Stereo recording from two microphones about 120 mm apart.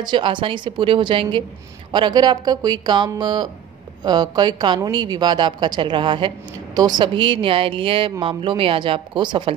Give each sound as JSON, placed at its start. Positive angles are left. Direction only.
{"t": 0.0, "sound": "a woman's voice", "side_deg": -40}